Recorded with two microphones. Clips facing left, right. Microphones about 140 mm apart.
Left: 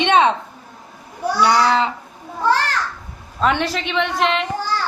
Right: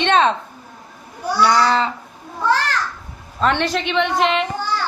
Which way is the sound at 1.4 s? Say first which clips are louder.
Even; 15° left (ahead or behind).